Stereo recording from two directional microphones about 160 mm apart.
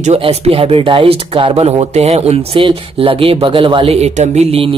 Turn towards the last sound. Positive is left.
turn(degrees=-40)  # may be behind; listen again after turning